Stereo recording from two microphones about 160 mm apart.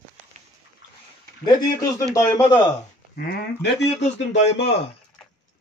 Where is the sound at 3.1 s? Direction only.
65° left (ahead or behind).